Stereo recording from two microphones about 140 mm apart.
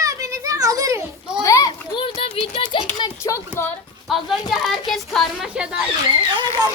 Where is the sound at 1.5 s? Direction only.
25° left (ahead or behind); by 3.1 s 40° left (ahead or behind).